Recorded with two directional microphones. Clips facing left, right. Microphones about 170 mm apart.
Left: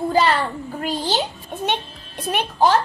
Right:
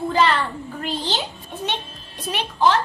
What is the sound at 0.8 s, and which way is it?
A child's voice, 45° left (ahead or behind).